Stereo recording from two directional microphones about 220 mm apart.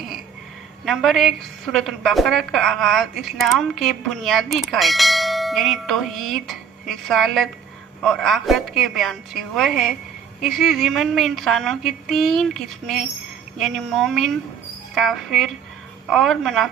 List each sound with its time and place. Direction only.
0.9 s a woman's voice: centre (ahead or behind)